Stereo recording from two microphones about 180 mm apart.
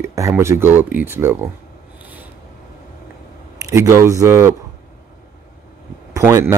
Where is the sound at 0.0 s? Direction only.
15° right (ahead or behind).